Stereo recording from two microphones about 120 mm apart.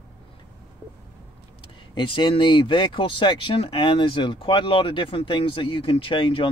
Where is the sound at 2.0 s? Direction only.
45° left (ahead or behind).